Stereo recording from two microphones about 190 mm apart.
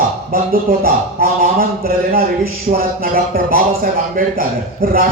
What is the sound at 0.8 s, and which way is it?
A man's voice, 50° right (ahead or behind).